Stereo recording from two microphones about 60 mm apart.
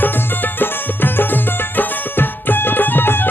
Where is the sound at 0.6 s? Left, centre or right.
Left.